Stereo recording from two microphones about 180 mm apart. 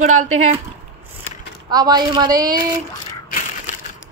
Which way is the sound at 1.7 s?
20° right (ahead or behind).